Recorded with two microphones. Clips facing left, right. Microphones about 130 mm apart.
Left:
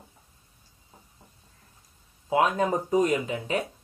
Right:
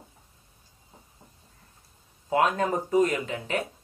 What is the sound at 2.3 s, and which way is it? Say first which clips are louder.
Speech: left 1 dB; 10° left (ahead or behind).